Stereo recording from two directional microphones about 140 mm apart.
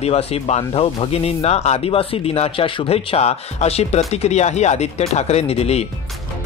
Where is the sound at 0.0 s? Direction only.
45° left (ahead or behind).